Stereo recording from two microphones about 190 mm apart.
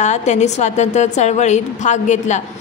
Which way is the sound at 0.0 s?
35° left (ahead or behind).